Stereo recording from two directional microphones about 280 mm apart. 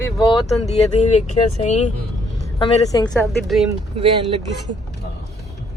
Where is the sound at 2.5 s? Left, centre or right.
Centre.